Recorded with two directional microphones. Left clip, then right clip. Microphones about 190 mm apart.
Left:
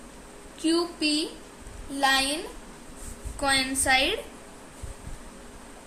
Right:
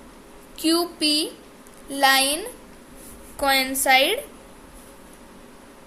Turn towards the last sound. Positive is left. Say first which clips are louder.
# right 5 dB
turn(degrees=-35)  # may be behind; listen again after turning